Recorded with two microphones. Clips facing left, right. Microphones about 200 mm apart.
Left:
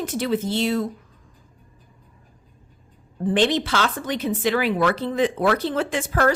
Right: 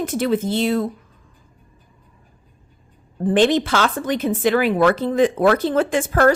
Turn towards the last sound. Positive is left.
turn(degrees=-50)  # may be behind; listen again after turning